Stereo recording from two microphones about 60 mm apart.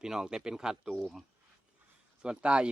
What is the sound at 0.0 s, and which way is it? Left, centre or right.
Speech, centre.